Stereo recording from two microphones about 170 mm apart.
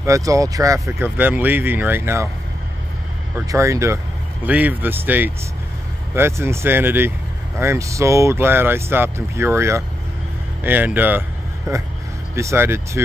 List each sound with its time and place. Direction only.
0.0 s speech: 20° right (ahead or behind)
3.3 s speech: 15° right (ahead or behind)